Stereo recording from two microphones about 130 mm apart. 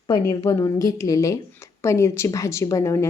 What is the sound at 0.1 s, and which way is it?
A woman's voice, 30° left (ahead or behind).